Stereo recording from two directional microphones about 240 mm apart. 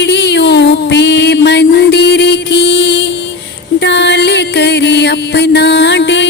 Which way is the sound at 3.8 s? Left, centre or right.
Left.